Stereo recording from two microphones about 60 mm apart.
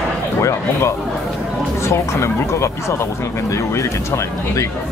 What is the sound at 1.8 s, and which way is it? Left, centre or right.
Speech, left.